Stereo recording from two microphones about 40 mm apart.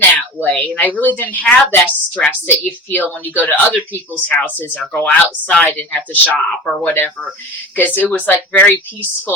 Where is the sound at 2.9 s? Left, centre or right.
Left.